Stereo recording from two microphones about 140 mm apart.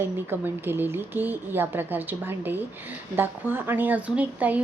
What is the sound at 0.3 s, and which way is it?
A woman's voice, 15° right (ahead or behind).